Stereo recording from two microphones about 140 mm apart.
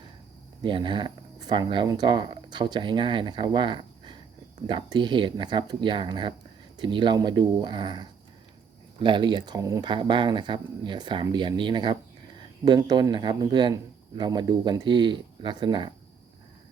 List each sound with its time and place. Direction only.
0.6 s speech: 35° right (ahead or behind)
9.9 s speech: 35° right (ahead or behind)